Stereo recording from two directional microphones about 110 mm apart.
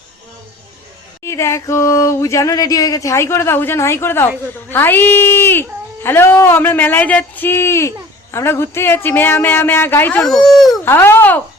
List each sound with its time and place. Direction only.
1.2 s speech: 25° left (ahead or behind)
10.2 s speech: 5° left (ahead or behind)
10.8 s speech: 20° left (ahead or behind)